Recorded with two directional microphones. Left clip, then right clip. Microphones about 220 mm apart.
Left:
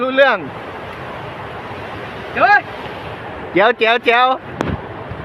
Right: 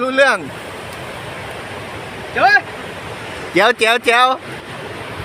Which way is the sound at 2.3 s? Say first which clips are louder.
Even; centre (ahead or behind).